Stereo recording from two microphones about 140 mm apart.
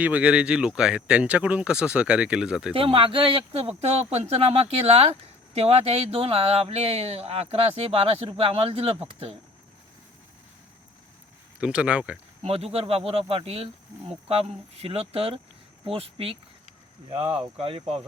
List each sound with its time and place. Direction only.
0.0 s speech: 10° right (ahead or behind)
2.7 s speech: 40° right (ahead or behind)
11.6 s speech: 10° right (ahead or behind)
12.4 s speech: 45° right (ahead or behind)